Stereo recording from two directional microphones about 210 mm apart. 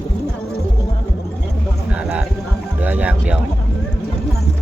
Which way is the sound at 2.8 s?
5° right (ahead or behind).